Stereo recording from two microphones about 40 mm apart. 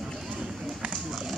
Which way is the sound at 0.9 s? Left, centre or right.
Centre.